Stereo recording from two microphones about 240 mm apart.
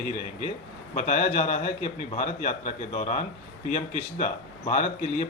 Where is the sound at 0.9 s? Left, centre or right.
Left.